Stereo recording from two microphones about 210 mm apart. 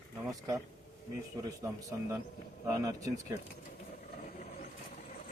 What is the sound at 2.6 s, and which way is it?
Speech, 15° right (ahead or behind).